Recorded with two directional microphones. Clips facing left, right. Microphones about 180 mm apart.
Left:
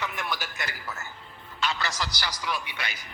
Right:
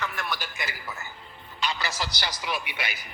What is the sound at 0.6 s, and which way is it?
A man's voice, 10° right (ahead or behind).